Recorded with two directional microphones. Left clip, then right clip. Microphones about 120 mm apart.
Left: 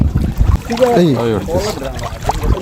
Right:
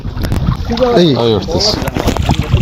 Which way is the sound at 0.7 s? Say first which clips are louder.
Right 1 dB; 15° left (ahead or behind).